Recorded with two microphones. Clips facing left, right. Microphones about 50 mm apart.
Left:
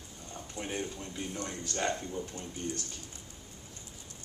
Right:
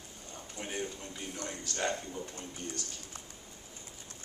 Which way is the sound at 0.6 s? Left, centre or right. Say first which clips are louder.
Left 3 dB; centre.